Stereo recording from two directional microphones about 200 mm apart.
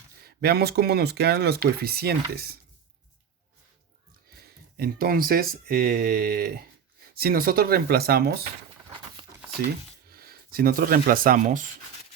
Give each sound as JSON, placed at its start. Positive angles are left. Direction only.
{"t": 0.2, "sound": "speech", "side_deg": -50}
{"t": 4.4, "sound": "speech", "side_deg": -50}
{"t": 10.1, "sound": "speech", "side_deg": -50}